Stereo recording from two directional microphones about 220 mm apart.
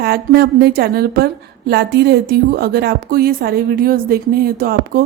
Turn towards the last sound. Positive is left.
turn(degrees=-45)  # may be behind; listen again after turning